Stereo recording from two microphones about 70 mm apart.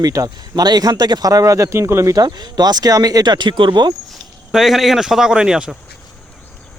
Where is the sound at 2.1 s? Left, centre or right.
Right.